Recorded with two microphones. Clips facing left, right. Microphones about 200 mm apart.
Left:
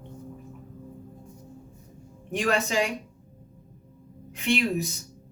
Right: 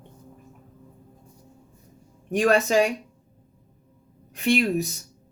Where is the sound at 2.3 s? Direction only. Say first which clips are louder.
Right 6 dB; 45° right (ahead or behind).